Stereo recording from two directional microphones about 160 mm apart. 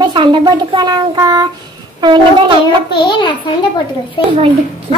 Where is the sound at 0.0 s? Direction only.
30° right (ahead or behind).